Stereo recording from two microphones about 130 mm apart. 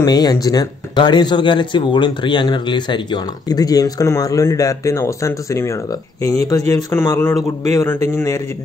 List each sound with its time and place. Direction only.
0.0 s a man's voice: 30° left (ahead or behind)